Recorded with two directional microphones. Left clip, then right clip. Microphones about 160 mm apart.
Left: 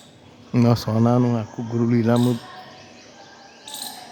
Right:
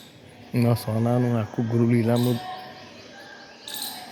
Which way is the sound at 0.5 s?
25° left (ahead or behind).